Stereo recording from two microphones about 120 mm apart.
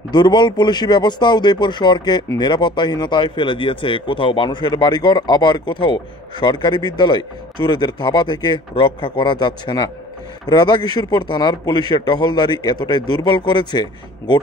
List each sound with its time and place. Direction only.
0.1 s speech: 35° left (ahead or behind)